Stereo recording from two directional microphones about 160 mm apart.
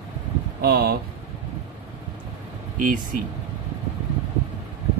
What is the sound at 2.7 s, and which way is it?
Speech, 60° right (ahead or behind).